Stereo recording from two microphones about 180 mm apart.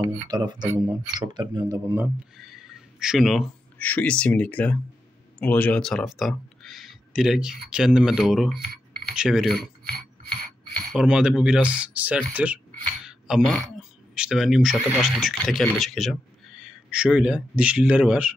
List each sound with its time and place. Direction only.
0.3 s speech: 25° right (ahead or behind)
2.0 s speech: 5° right (ahead or behind)
10.9 s speech: 5° right (ahead or behind)